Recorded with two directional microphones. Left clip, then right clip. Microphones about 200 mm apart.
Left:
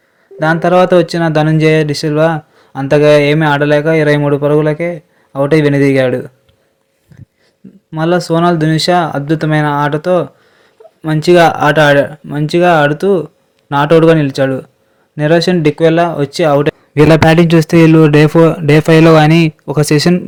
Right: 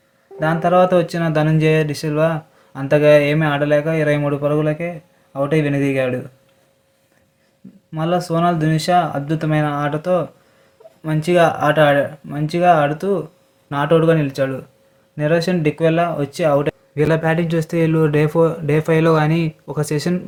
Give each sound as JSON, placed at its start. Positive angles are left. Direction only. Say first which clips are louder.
{"t": 0.3, "sound": "speech", "louder": "left 5 dB", "side_deg": 40}
{"t": 7.9, "sound": "speech", "louder": "left 7 dB", "side_deg": 40}